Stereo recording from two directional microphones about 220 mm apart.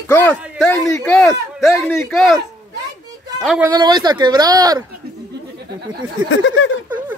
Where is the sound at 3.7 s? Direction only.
20° right (ahead or behind).